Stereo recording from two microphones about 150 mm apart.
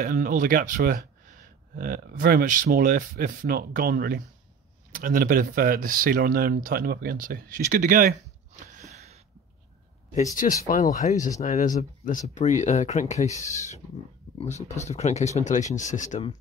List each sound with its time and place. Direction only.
0.0 s speech: 70° right (ahead or behind)
10.3 s speech: 65° left (ahead or behind)